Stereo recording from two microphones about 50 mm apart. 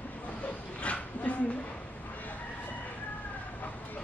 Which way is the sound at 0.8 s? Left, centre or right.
Left.